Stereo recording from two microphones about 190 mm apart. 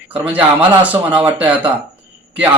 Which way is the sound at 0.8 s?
10° right (ahead or behind).